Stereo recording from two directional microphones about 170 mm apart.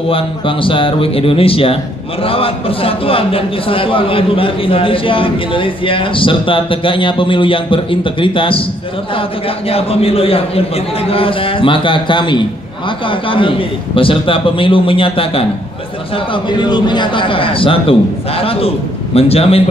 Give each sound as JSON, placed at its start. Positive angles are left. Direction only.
{"t": 0.1, "sound": "a man's voice", "side_deg": 30}
{"t": 9.7, "sound": "a man's voice", "side_deg": 35}
{"t": 16.4, "sound": "a man's voice", "side_deg": 25}